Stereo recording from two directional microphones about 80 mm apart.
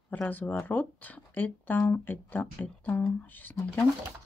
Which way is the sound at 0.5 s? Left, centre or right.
Left.